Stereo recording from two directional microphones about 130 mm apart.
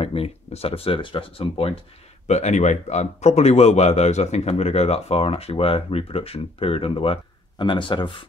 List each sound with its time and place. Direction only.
0.0 s speech: 50° left (ahead or behind)
2.2 s speech: 60° left (ahead or behind); by 8.3 s 40° left (ahead or behind)